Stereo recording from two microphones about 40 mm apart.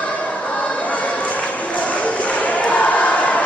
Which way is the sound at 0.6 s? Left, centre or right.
Left.